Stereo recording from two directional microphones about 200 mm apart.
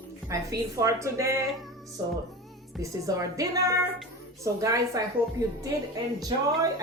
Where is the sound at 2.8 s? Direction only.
15° right (ahead or behind).